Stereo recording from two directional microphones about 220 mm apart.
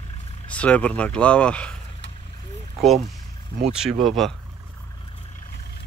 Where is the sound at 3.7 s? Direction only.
Centre (ahead or behind).